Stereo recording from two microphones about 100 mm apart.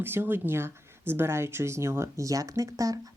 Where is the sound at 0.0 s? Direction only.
20° right (ahead or behind).